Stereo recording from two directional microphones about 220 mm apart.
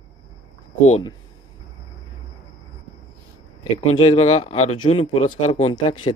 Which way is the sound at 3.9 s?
25° left (ahead or behind).